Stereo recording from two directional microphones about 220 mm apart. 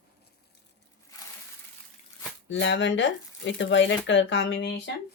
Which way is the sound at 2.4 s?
55° left (ahead or behind).